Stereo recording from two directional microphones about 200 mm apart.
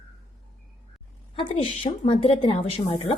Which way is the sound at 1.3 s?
25° left (ahead or behind).